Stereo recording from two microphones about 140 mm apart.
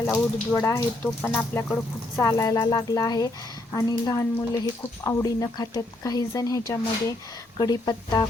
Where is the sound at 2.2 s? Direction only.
25° left (ahead or behind).